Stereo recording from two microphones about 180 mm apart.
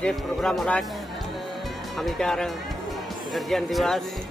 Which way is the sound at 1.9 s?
Centre (ahead or behind).